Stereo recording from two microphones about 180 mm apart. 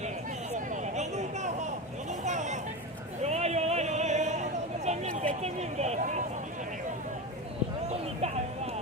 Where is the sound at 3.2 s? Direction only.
40° right (ahead or behind).